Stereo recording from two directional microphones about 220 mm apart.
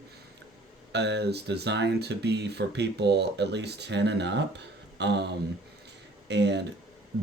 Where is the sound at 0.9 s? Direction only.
50° right (ahead or behind).